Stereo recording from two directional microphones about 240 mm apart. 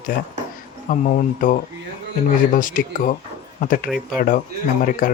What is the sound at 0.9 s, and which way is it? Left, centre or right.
Speech, left.